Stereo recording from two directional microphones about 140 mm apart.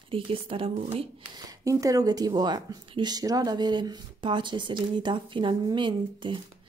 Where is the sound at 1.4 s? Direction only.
25° right (ahead or behind).